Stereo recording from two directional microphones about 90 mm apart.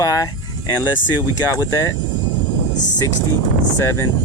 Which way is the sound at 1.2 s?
25° right (ahead or behind).